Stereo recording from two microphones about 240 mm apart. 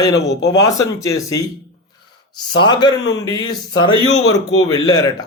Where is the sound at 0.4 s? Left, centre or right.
Centre.